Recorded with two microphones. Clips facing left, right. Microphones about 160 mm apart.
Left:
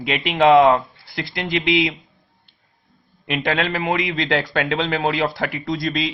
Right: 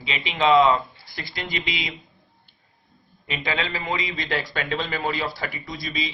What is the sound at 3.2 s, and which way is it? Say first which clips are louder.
Speech: left 6 dB; 65° left (ahead or behind).